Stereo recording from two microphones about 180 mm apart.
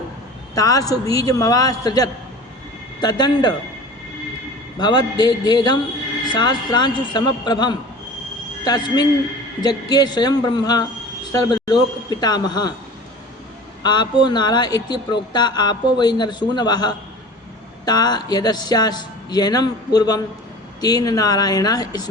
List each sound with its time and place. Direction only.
0.5 s a man's voice: 20° left (ahead or behind)
4.8 s a man's voice: 25° left (ahead or behind)
13.8 s a man's voice: 25° left (ahead or behind)